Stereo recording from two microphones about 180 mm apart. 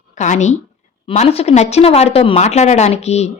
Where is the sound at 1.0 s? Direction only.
35° left (ahead or behind).